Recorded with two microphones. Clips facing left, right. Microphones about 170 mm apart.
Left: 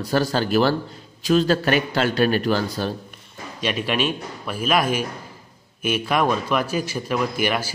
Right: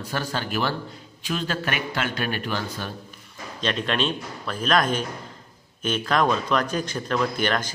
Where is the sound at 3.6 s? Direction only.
10° left (ahead or behind).